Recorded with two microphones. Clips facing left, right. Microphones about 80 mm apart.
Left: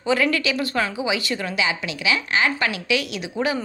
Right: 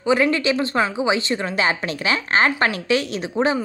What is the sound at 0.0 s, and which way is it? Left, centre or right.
A woman's voice, right.